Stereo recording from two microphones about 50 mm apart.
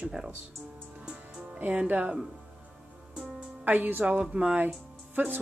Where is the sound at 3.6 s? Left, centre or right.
Right.